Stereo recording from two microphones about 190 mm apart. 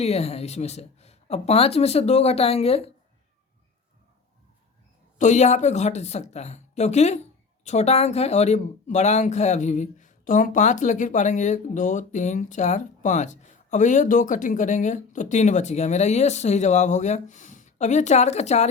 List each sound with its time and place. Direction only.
0.0 s a woman's voice: 30° left (ahead or behind)
5.1 s a woman's voice: 40° left (ahead or behind)